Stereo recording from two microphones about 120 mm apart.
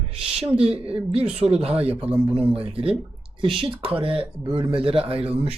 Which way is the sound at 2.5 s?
50° right (ahead or behind).